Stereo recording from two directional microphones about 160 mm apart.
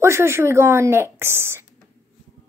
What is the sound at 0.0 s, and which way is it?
A woman's voice, 15° right (ahead or behind).